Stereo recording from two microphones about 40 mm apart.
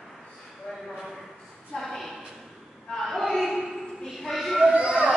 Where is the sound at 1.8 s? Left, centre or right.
Centre.